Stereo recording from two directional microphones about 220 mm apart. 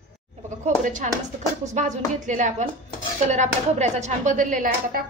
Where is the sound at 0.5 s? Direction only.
35° right (ahead or behind).